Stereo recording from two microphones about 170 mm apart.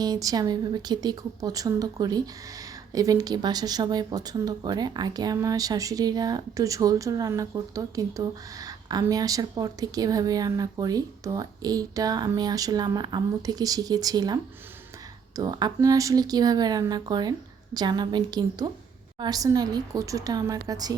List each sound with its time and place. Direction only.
0.0 s speech: 20° right (ahead or behind)
15.4 s speech: 25° right (ahead or behind)